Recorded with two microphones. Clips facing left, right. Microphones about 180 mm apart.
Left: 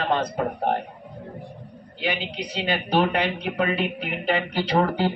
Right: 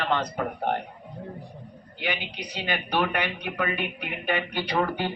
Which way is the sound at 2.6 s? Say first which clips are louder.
Left 4 dB; 35° left (ahead or behind).